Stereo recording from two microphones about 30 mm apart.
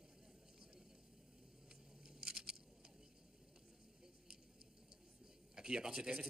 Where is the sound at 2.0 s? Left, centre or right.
Right.